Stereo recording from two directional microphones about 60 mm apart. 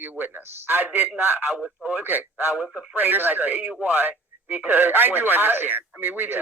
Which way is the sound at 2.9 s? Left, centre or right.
Right.